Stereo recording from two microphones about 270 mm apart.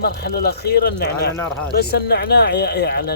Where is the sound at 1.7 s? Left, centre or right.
Left.